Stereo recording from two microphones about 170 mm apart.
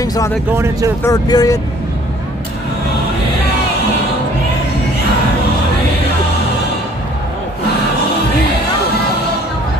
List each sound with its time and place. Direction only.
0.0 s a sound: 20° left (ahead or behind)
0.5 s speech: 15° right (ahead or behind)
1.0 s speech: 20° left (ahead or behind)